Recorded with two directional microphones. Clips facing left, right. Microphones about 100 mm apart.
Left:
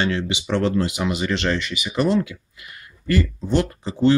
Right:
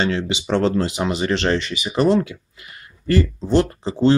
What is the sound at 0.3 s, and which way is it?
Speech, 30° right (ahead or behind).